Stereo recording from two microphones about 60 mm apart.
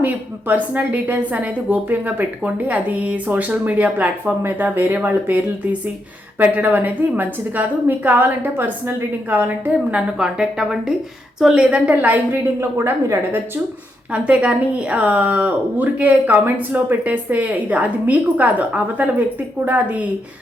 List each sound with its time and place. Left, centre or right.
0.0 s a woman's voice: right
6.4 s speech: right
9.9 s speech: centre
11.5 s speech: centre
12.5 s speech: right
14.1 s speech: right